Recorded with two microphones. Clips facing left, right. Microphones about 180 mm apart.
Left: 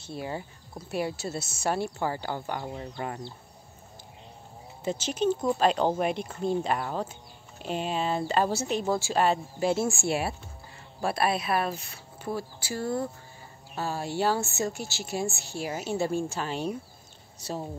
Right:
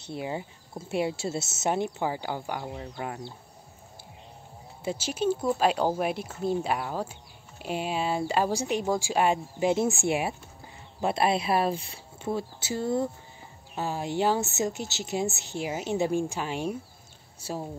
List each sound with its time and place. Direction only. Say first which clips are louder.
0.0 s speech: right 2 dB; 20° right (ahead or behind); by 3.2 s centre (ahead or behind)
4.8 s speech: left 1 dB; 10° right (ahead or behind)